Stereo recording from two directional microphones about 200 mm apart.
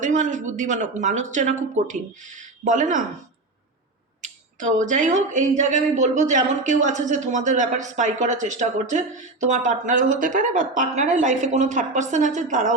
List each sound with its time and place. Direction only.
0.0 s speech: 40° right (ahead or behind)
4.2 s speech: 40° right (ahead or behind)